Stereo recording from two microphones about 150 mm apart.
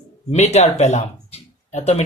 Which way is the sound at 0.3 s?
45° left (ahead or behind).